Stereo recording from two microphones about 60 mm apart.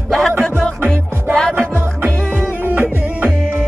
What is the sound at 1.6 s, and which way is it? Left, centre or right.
Music, right.